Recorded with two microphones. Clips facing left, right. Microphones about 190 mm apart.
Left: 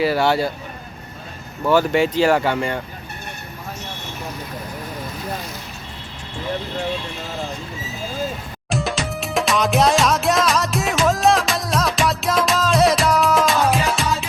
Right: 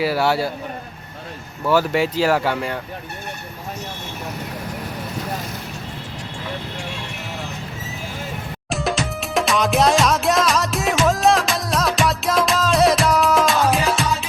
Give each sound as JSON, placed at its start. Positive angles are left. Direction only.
{"t": 0.0, "sound": "speech", "side_deg": -5}
{"t": 1.7, "sound": "speech", "side_deg": -5}
{"t": 8.7, "sound": "music", "side_deg": 0}